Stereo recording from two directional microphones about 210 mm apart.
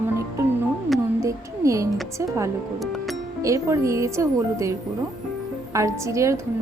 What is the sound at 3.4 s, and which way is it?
Speech, 15° right (ahead or behind).